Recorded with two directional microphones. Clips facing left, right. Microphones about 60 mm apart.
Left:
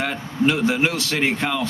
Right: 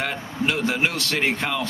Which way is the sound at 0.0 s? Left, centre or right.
Centre.